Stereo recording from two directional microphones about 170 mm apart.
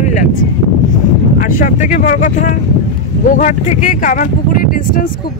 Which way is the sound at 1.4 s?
50° left (ahead or behind).